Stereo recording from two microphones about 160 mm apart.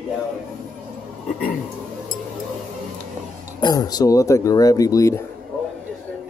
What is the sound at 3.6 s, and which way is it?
Speech, 25° left (ahead or behind).